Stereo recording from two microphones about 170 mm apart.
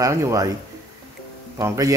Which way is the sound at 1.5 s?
20° right (ahead or behind).